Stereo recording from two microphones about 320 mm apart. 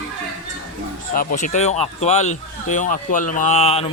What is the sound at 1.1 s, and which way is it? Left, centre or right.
Speech, left.